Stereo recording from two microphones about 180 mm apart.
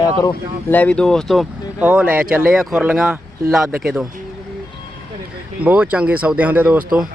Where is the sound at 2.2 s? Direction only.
55° right (ahead or behind).